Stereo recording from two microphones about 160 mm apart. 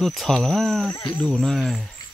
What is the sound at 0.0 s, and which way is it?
Speech, centre (ahead or behind).